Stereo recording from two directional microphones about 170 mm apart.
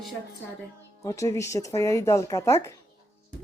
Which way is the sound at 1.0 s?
20° left (ahead or behind).